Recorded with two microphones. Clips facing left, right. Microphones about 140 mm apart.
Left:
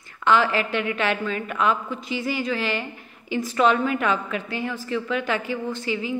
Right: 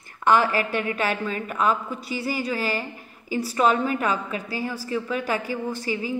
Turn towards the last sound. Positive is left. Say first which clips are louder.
# left 1 dB
turn(degrees=-40)  # may be behind; listen again after turning